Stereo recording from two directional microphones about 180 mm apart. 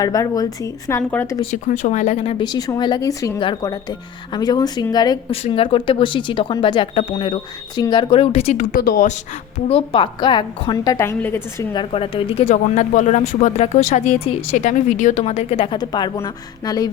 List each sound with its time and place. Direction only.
0.0 s a woman's voice: 20° left (ahead or behind)
1.4 s speech: 40° left (ahead or behind)
8.5 s speech: 55° left (ahead or behind)
9.6 s speech: 30° left (ahead or behind); by 11.6 s 15° left (ahead or behind)
11.7 s speech: 30° left (ahead or behind)